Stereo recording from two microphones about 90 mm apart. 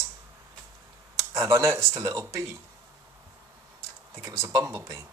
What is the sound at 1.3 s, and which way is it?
Speech, 35° right (ahead or behind).